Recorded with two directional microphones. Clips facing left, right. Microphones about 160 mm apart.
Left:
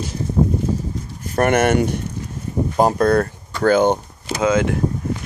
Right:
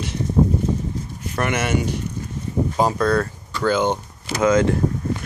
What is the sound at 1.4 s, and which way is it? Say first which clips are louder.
Speech: left 6 dB; 55° left (ahead or behind).